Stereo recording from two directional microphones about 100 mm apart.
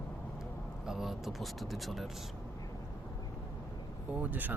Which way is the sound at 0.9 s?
5° right (ahead or behind).